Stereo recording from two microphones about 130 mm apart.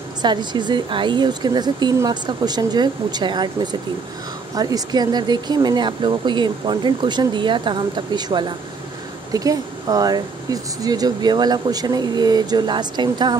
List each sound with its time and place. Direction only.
0.2 s speech: 35° right (ahead or behind)